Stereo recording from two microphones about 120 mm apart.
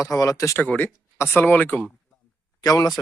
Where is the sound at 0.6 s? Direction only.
15° left (ahead or behind).